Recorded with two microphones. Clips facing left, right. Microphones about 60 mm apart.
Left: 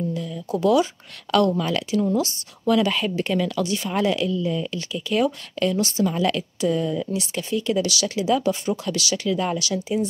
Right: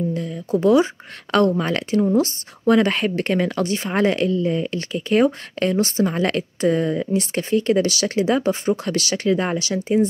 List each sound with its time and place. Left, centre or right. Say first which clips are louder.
0.1 s a woman's voice: right 4 dB; right